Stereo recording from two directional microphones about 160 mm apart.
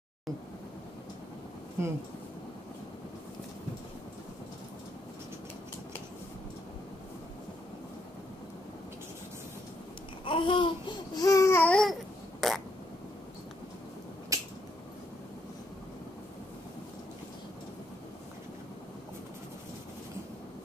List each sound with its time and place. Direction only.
1.8 s speech: 15° right (ahead or behind)
10.2 s babbling: 30° left (ahead or behind); by 12.6 s centre (ahead or behind)
14.3 s finger snapping: 20° right (ahead or behind)